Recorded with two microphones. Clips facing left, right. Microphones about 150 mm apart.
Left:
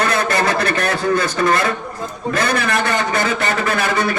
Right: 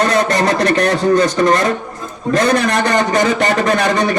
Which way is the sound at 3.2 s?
40° right (ahead or behind).